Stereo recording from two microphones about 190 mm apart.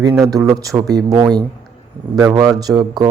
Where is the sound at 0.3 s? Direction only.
20° right (ahead or behind).